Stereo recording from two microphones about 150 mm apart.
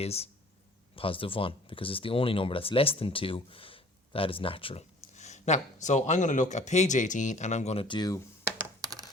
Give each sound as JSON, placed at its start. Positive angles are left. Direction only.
{"t": 0.0, "sound": "speech", "side_deg": 45}
{"t": 8.4, "sound": "computer keyboard", "side_deg": -20}